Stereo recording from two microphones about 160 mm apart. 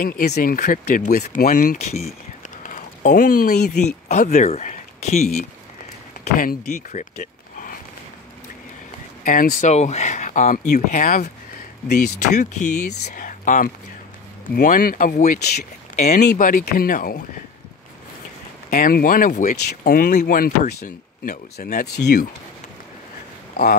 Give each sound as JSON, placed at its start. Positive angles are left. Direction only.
{"t": 0.0, "sound": "speech", "side_deg": 70}
{"t": 2.6, "sound": "speech", "side_deg": 55}
{"t": 6.3, "sound": "speech", "side_deg": 60}
{"t": 9.2, "sound": "speech", "side_deg": 60}
{"t": 12.4, "sound": "speech", "side_deg": 50}
{"t": 15.3, "sound": "speech", "side_deg": 85}
{"t": 16.2, "sound": "speech", "side_deg": 60}
{"t": 18.7, "sound": "speech", "side_deg": 60}
{"t": 23.5, "sound": "speech", "side_deg": 70}